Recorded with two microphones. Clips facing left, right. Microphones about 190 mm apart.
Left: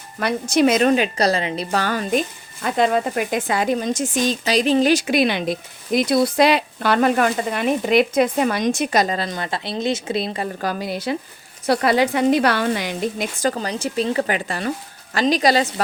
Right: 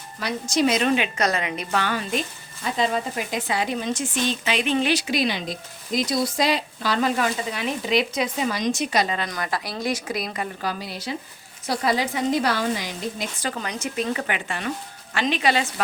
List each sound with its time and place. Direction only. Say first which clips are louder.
0.2 s a woman's voice: left 5 dB; 60° left (ahead or behind); by 10.5 s 30° left (ahead or behind)
10.6 s speech: left 6 dB; 50° left (ahead or behind)
11.6 s speech: left 6 dB; 65° left (ahead or behind)
13.4 s a woman's voice: left 7 dB; 35° left (ahead or behind)